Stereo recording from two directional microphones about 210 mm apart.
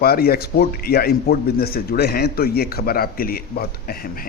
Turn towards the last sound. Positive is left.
turn(degrees=45)  # may be behind; listen again after turning